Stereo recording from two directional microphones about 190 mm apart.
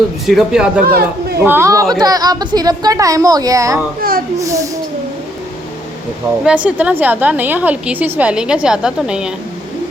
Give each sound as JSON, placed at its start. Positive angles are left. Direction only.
{"t": 0.3, "sound": "a man's voice", "side_deg": 0}
{"t": 0.9, "sound": "speech", "side_deg": -55}
{"t": 1.5, "sound": "a woman's voice", "side_deg": -15}
{"t": 6.4, "sound": "a woman's voice", "side_deg": -5}